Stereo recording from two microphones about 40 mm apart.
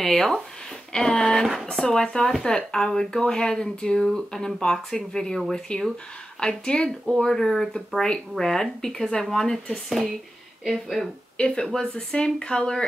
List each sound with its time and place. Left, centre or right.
0.0 s speech: centre; by 7.0 s left
7.1 s speech: centre
11.3 s speech: left